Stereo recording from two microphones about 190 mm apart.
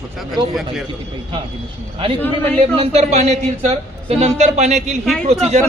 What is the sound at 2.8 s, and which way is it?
A man's voice, 35° right (ahead or behind).